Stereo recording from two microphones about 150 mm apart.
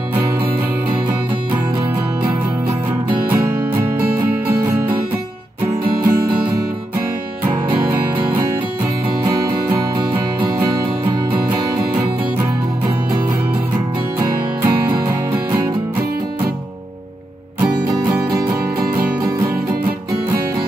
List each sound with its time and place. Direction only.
6.0 s music: 30° right (ahead or behind)
9.2 s music: 25° right (ahead or behind)
14.1 s music: 15° right (ahead or behind)